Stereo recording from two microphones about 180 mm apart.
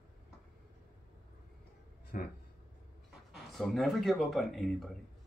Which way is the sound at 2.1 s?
50° left (ahead or behind).